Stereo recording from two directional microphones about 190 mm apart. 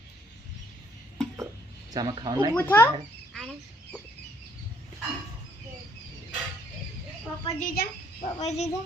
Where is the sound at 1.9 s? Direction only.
20° right (ahead or behind).